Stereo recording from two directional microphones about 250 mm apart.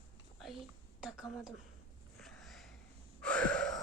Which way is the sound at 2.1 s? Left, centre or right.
Centre.